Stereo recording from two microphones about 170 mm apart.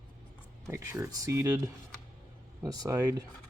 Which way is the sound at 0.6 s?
15° right (ahead or behind).